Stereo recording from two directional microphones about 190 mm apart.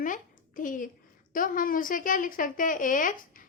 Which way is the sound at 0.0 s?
45° left (ahead or behind).